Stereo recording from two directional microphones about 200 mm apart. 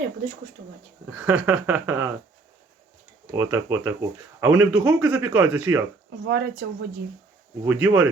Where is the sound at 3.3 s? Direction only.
10° right (ahead or behind).